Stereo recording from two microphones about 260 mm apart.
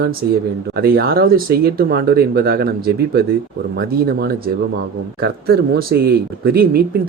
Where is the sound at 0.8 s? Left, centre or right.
Right.